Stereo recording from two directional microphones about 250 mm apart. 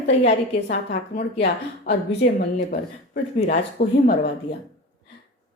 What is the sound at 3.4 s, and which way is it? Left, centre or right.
Speech, left.